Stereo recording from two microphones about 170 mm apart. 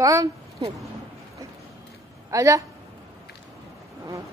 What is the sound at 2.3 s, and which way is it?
Speech, 20° right (ahead or behind).